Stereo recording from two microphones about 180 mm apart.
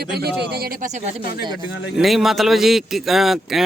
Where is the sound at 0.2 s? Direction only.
60° right (ahead or behind).